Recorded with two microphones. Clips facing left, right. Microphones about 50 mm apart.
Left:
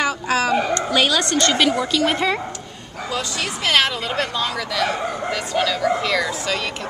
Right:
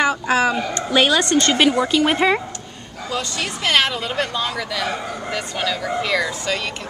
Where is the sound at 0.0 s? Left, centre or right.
Centre.